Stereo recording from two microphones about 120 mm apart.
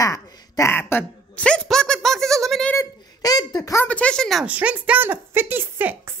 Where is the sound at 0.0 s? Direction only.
25° left (ahead or behind); by 2.7 s centre (ahead or behind).